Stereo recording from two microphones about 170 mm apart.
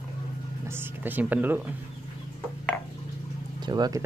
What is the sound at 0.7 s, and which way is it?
Speech, 15° right (ahead or behind).